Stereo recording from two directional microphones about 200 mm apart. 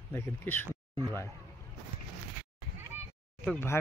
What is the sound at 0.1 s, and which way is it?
Speech, 10° left (ahead or behind).